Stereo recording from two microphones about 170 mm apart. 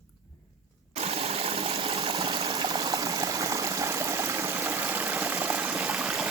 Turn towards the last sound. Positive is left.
turn(degrees=0)  # may be behind; listen again after turning